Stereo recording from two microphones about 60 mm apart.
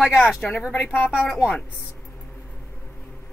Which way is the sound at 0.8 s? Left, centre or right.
Left.